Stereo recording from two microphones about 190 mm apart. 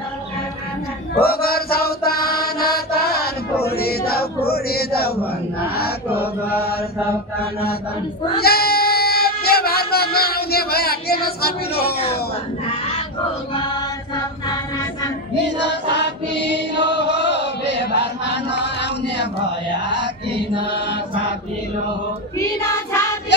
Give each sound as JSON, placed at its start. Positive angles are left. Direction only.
{"t": 1.2, "sound": "mantra", "side_deg": 55}
{"t": 3.6, "sound": "chant", "side_deg": 55}
{"t": 8.4, "sound": "a sound", "side_deg": 55}
{"t": 15.6, "sound": "chant", "side_deg": 65}